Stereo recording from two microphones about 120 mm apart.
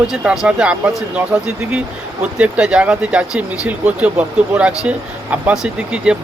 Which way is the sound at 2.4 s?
10° right (ahead or behind).